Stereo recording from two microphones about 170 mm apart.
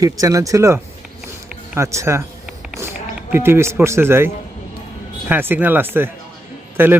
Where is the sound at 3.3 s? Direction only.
15° right (ahead or behind).